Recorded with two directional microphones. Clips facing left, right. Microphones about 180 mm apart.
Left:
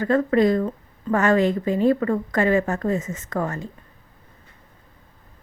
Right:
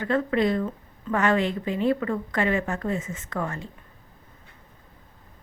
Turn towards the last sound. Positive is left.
turn(degrees=40)  # may be behind; listen again after turning